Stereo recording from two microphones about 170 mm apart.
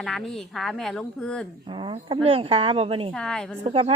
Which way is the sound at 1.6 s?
30° right (ahead or behind).